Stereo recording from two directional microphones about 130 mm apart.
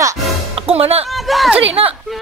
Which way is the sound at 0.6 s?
50° right (ahead or behind).